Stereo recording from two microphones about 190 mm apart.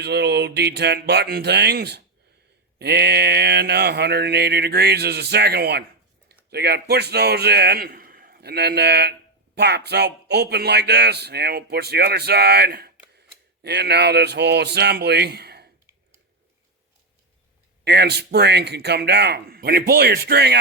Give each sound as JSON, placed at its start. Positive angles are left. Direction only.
{"t": 0.0, "sound": "a man's voice", "side_deg": -60}
{"t": 17.8, "sound": "speech", "side_deg": -60}